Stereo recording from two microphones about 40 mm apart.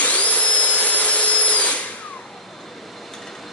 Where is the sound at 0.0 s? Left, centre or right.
Left.